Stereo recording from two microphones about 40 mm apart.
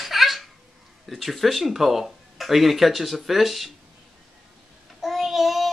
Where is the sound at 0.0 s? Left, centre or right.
Centre.